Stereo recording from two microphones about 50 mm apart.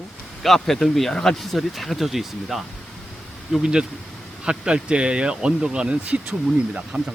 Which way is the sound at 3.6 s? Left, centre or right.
Centre.